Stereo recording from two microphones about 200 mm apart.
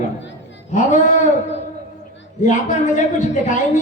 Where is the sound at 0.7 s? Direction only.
40° left (ahead or behind).